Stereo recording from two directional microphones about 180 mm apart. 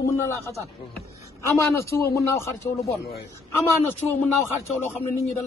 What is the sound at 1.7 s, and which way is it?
Speech, 15° left (ahead or behind).